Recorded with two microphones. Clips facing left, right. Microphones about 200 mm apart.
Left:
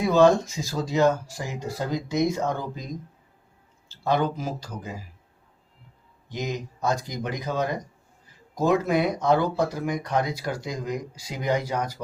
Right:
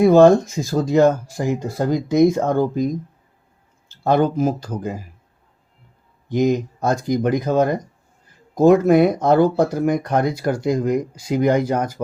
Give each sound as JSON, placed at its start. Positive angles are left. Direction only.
{"t": 0.0, "sound": "speech", "side_deg": -50}
{"t": 6.2, "sound": "speech", "side_deg": -50}